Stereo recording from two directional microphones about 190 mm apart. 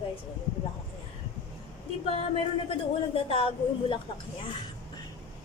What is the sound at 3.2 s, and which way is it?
Speech, 30° left (ahead or behind).